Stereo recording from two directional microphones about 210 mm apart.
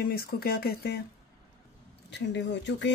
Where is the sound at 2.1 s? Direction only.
55° left (ahead or behind).